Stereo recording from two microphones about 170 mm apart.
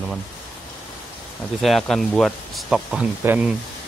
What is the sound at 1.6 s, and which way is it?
Speech, centre (ahead or behind).